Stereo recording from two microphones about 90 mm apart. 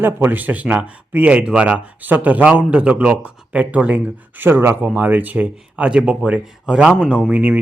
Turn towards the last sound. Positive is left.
turn(degrees=-20)  # may be behind; listen again after turning